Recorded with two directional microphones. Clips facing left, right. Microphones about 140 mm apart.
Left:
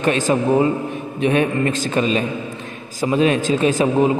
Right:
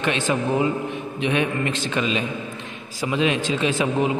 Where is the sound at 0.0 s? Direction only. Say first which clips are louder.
Left 5 dB; 40° left (ahead or behind).